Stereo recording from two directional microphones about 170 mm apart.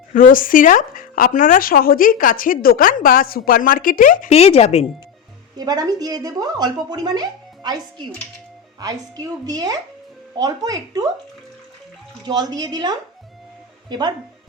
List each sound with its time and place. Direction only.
0.1 s speech: 55° left (ahead or behind)
4.3 s speech: 35° left (ahead or behind)
5.5 s speech: 25° right (ahead or behind)
8.8 s speech: 20° right (ahead or behind)
12.2 s speech: 25° right (ahead or behind)